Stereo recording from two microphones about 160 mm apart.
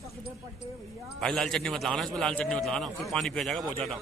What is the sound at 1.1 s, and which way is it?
A man's voice, centre (ahead or behind).